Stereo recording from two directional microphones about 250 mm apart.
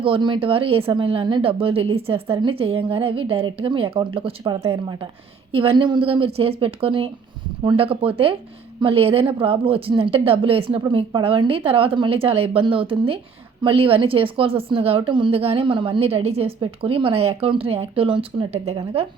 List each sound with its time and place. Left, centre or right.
0.0 s a woman's voice: centre